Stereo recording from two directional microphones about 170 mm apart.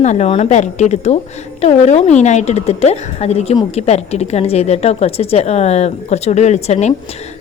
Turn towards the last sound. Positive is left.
turn(degrees=40)  # may be behind; listen again after turning